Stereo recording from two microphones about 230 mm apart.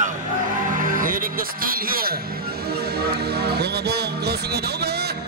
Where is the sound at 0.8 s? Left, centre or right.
Right.